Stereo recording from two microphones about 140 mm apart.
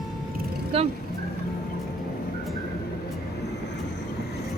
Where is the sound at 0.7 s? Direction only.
40° right (ahead or behind).